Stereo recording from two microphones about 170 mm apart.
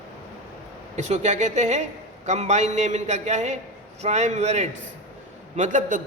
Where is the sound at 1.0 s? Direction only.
40° right (ahead or behind).